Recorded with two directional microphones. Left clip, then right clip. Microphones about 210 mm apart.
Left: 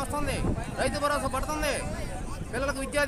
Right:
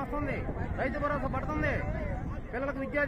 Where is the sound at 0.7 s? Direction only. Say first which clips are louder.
Left 4 dB; 20° left (ahead or behind).